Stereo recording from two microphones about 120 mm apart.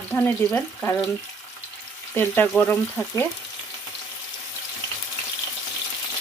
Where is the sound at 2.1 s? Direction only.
20° left (ahead or behind).